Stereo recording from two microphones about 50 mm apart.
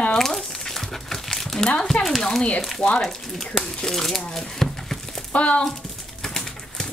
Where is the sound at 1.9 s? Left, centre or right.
Centre.